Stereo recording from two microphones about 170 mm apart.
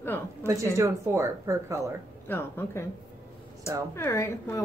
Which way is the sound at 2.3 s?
15° left (ahead or behind).